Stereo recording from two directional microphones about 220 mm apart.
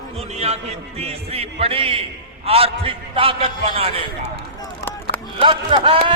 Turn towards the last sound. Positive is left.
turn(degrees=-25)  # may be behind; listen again after turning